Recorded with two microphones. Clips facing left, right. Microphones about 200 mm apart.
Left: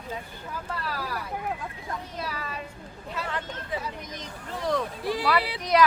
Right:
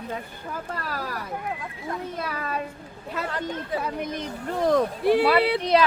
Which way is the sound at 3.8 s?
60° right (ahead or behind).